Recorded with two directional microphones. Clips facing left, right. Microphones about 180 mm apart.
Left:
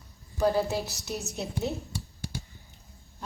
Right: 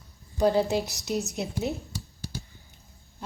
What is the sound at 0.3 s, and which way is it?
Speech, 15° right (ahead or behind).